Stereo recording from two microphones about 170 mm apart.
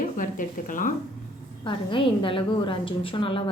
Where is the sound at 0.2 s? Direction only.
50° left (ahead or behind).